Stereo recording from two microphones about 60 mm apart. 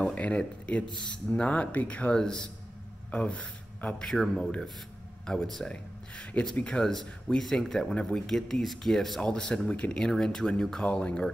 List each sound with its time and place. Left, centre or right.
0.0 s speech: left
2.1 s speech: centre
3.1 s speech: left
4.0 s speech: centre